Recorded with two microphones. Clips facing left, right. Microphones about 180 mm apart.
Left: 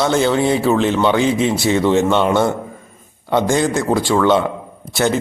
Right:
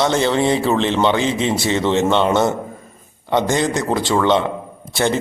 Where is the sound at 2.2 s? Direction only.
20° right (ahead or behind).